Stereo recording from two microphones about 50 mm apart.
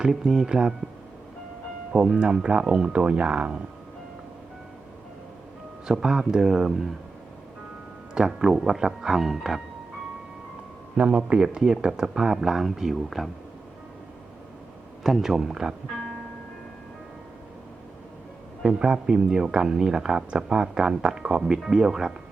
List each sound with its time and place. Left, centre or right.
0.0 s speech: centre
1.9 s speech: right
5.9 s speech: centre
8.1 s speech: centre
10.9 s speech: right; by 13.3 s centre
15.0 s speech: centre
18.6 s speech: centre